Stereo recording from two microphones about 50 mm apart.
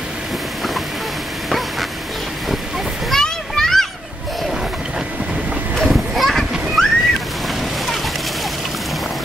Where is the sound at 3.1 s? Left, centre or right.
Centre.